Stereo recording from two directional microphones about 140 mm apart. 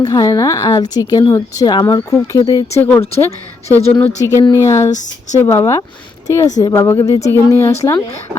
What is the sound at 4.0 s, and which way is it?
Speech, 15° left (ahead or behind).